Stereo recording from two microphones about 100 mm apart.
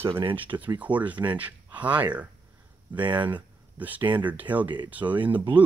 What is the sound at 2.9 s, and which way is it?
Speech, 50° right (ahead or behind).